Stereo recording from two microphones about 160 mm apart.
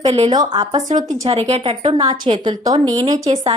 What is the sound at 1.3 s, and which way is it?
A woman's voice, 40° right (ahead or behind).